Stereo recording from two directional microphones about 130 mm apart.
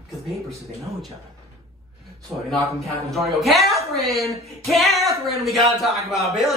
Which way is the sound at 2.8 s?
Centre (ahead or behind).